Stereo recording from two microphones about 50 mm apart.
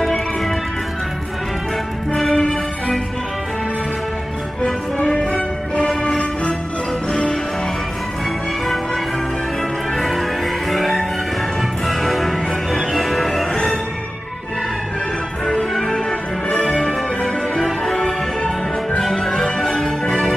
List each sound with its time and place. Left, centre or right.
2.1 s music: centre
4.9 s music: left
9.9 s music: centre
13.5 s music: centre
15.7 s music: centre
16.1 s music: centre
17.6 s music: centre
17.9 s music: centre
18.9 s music: centre